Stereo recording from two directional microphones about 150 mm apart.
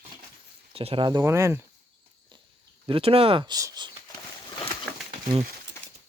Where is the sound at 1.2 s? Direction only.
20° right (ahead or behind).